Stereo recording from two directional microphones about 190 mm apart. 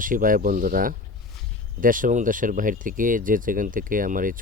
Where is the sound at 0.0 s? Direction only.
45° right (ahead or behind).